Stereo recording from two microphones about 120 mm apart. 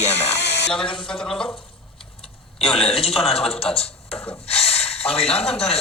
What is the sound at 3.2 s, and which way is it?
A man's voice, 55° left (ahead or behind).